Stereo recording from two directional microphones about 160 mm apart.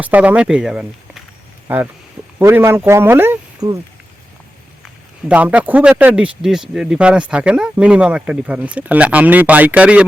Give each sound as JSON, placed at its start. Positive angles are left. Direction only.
{"t": 0.0, "sound": "speech", "side_deg": -10}
{"t": 5.3, "sound": "speech", "side_deg": -10}